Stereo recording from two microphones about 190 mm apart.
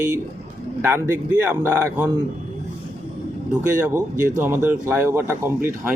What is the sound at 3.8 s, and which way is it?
Speech, 10° right (ahead or behind).